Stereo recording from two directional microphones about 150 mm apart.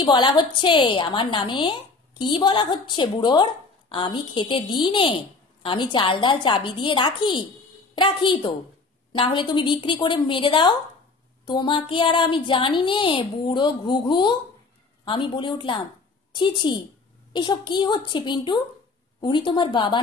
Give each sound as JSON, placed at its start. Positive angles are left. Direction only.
{"t": 0.0, "sound": "a woman's voice", "side_deg": 30}